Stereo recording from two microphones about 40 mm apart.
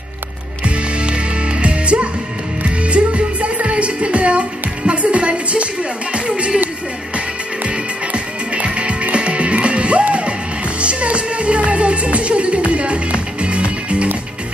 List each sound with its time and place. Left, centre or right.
1.0 s music: right
6.1 s speech: right
7.6 s music: right